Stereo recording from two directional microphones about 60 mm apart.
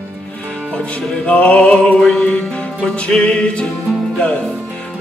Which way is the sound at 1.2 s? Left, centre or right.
Left.